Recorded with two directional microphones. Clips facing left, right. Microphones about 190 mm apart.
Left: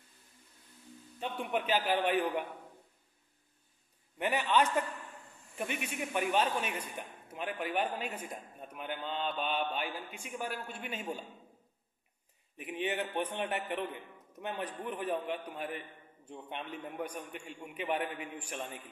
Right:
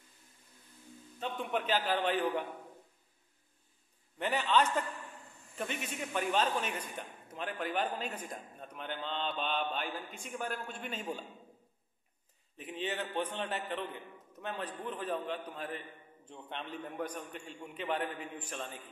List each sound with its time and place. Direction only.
1.2 s a man's voice: 10° left (ahead or behind)
4.2 s a man's voice: 10° left (ahead or behind)
12.5 s a man's voice: 10° left (ahead or behind)